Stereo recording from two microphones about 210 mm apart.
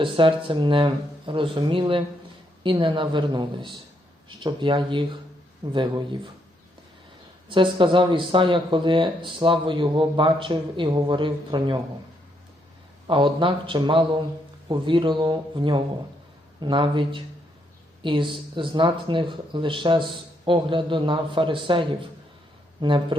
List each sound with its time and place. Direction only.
0.0 s speech: 25° right (ahead or behind)
7.5 s speech: 25° right (ahead or behind)
13.1 s speech: 25° right (ahead or behind)